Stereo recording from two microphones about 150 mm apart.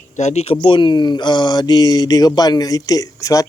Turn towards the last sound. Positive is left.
turn(degrees=20)  # may be behind; listen again after turning